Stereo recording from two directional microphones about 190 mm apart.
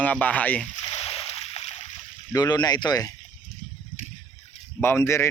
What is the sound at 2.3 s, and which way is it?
Speech, 20° left (ahead or behind).